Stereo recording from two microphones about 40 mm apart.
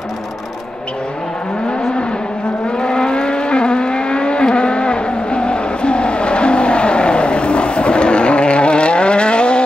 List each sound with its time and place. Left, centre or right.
2.8 s vehicle: left